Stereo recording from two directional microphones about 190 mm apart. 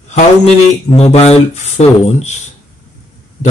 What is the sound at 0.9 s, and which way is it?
A man's voice, 35° left (ahead or behind).